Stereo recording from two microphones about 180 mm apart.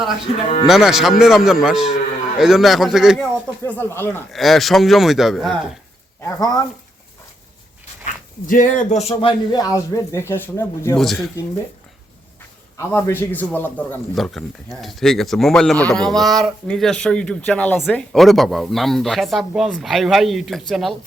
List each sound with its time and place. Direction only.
0.7 s speech: centre (ahead or behind)
3.6 s speech: 10° left (ahead or behind)
4.3 s speech: centre (ahead or behind)
6.2 s speech: 20° left (ahead or behind)
8.0 s speech: 45° left (ahead or behind); by 10.9 s 15° left (ahead or behind)
10.9 s speech: centre (ahead or behind)
12.7 s speech: 15° left (ahead or behind)